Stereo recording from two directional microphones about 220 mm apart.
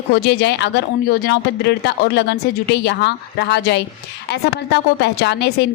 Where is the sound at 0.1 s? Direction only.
50° left (ahead or behind).